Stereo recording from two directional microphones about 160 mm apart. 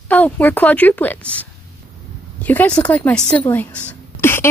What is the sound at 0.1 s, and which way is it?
A woman's voice, 10° left (ahead or behind).